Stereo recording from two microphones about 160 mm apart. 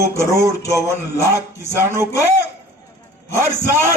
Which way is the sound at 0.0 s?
15° right (ahead or behind).